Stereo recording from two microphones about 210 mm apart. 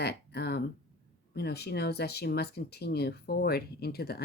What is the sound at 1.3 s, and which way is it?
Speech, 50° left (ahead or behind).